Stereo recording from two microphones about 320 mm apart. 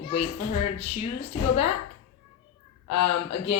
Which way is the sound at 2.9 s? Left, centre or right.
Left.